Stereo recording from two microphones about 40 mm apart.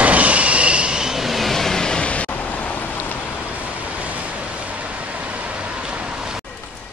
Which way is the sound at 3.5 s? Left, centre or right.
Right.